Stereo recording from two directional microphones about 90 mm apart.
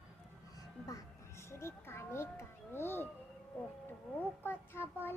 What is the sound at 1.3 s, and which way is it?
A child's voice, 30° left (ahead or behind).